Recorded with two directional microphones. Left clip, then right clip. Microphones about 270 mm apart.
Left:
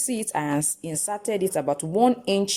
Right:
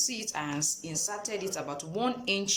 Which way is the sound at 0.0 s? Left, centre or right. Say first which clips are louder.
Left 5 dB; left.